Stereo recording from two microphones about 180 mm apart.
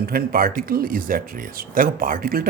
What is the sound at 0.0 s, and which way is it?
Speech, 55° right (ahead or behind).